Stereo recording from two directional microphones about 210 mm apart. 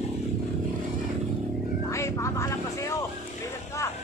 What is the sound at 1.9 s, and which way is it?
Music, 15° left (ahead or behind).